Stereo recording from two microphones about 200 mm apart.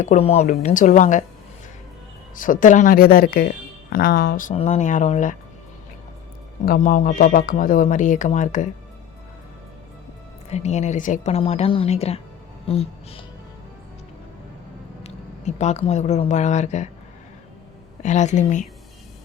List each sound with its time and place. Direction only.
0.0 s speech: 35° left (ahead or behind)
2.3 s speech: 40° left (ahead or behind)
4.5 s speech: 35° left (ahead or behind)
6.7 s speech: 40° left (ahead or behind)
10.5 s speech: 35° left (ahead or behind)
15.0 s speech: 35° left (ahead or behind)
18.0 s speech: 35° left (ahead or behind)